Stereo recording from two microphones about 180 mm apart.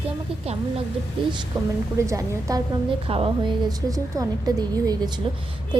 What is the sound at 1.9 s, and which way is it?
Speech, 15° right (ahead or behind).